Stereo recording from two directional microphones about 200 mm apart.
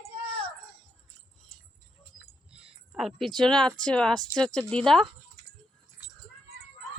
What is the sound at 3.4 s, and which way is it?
Speech, 5° left (ahead or behind).